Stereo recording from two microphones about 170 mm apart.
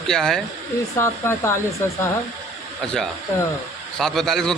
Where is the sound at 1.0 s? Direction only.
15° left (ahead or behind).